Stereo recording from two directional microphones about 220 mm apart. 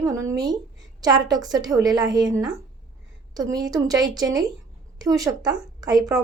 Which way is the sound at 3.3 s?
15° right (ahead or behind).